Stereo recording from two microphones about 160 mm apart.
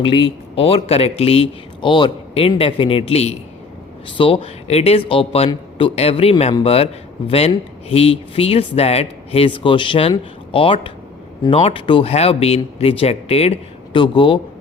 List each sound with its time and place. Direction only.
0.0 s speech: 35° left (ahead or behind)